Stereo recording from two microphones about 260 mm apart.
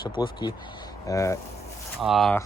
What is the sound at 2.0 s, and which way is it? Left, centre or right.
Speech, centre.